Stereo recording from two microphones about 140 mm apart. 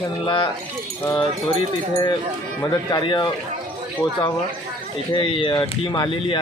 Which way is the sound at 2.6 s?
30° left (ahead or behind).